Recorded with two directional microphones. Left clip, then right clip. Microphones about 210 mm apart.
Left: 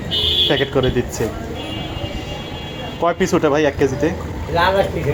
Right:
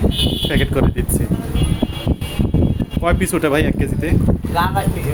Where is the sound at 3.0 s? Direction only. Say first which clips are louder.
Left 2 dB; 20° right (ahead or behind).